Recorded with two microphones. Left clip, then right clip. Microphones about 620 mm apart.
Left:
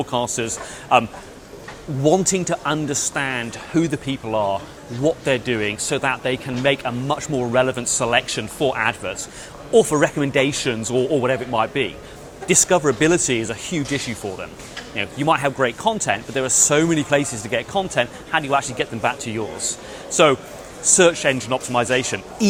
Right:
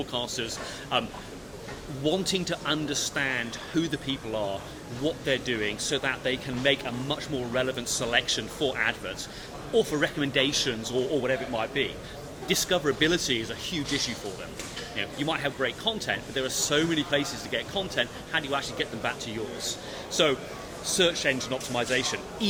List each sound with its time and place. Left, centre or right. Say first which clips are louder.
0.1 s speech: left 9 dB; left
2.0 s speech: left 10 dB; left